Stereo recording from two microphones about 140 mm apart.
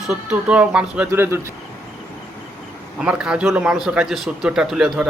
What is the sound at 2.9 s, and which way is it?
A man's voice, 5° right (ahead or behind).